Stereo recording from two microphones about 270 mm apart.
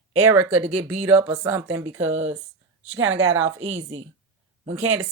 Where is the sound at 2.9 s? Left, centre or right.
Right.